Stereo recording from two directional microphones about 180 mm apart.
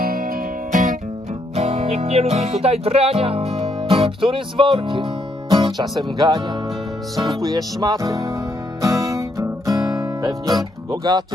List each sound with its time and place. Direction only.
0.0 s music: 55° right (ahead or behind)
1.5 s music: 35° right (ahead or behind)
7.4 s music: 20° right (ahead or behind)